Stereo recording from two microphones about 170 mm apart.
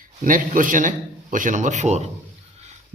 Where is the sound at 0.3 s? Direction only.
50° right (ahead or behind).